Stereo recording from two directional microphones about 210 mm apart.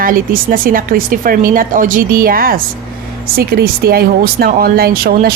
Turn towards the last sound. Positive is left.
turn(degrees=-45)  # may be behind; listen again after turning